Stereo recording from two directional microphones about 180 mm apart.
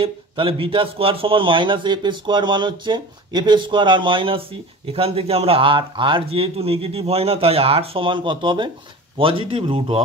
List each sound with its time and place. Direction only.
0.0 s speech: 30° right (ahead or behind)